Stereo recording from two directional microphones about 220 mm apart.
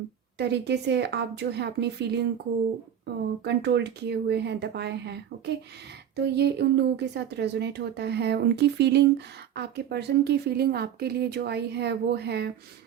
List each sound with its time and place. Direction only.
0.3 s speech: 50° right (ahead or behind)
3.4 s speech: 50° right (ahead or behind)